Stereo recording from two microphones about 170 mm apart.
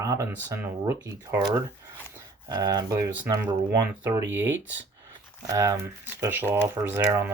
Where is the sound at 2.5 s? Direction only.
25° right (ahead or behind).